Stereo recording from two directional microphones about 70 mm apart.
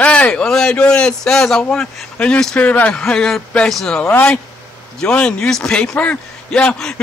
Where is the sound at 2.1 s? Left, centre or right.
Centre.